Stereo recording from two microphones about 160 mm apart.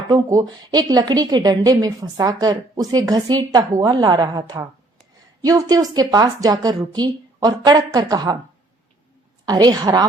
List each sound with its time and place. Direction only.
0.1 s a woman's voice: 25° right (ahead or behind)
9.5 s a woman's voice: 25° right (ahead or behind)